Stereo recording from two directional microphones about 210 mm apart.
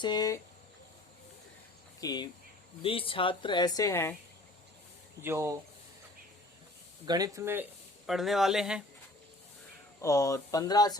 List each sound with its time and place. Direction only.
0.0 s speech: 20° left (ahead or behind)
2.0 s speech: 20° left (ahead or behind)
5.2 s speech: 10° right (ahead or behind)
7.0 s speech: 20° right (ahead or behind); by 8.8 s centre (ahead or behind)
10.0 s speech: 15° left (ahead or behind)